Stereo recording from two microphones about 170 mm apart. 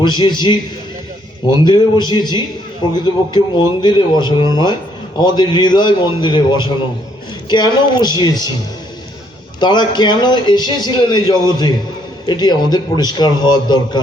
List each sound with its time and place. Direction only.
0.0 s a man's voice: 25° left (ahead or behind)
9.6 s a man's voice: 25° left (ahead or behind)